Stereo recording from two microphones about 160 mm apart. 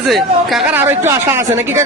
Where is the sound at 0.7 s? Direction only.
15° right (ahead or behind).